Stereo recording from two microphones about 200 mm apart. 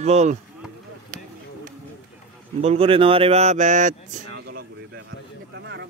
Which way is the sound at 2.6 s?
30° right (ahead or behind).